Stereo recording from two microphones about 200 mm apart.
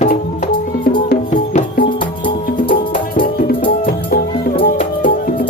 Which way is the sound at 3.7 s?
45° left (ahead or behind).